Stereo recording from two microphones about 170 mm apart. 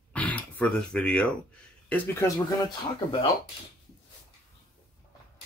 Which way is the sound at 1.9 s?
15° left (ahead or behind).